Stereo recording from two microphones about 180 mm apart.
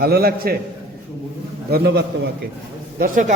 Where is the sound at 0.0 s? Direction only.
55° right (ahead or behind).